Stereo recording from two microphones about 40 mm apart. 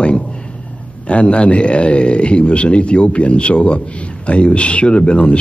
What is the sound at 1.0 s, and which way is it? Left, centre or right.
Speech, left.